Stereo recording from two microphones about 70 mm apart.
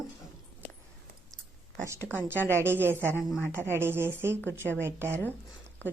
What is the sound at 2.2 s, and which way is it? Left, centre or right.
A woman's voice, right.